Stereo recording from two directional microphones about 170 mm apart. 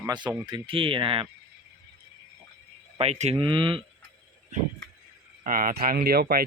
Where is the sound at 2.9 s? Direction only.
40° right (ahead or behind).